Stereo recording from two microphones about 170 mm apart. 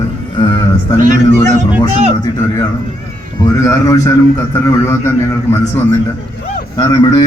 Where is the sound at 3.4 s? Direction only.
20° left (ahead or behind).